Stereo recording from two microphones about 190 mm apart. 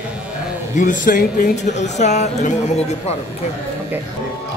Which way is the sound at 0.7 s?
40° left (ahead or behind).